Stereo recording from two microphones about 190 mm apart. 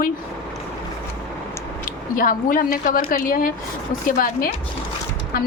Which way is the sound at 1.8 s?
45° left (ahead or behind).